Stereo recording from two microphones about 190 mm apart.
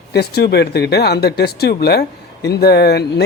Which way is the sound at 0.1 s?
60° left (ahead or behind).